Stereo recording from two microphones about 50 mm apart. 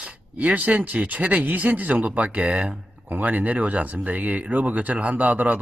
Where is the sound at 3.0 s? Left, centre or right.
Right.